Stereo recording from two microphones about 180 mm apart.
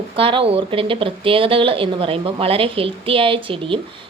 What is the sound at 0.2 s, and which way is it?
Speech, 30° right (ahead or behind).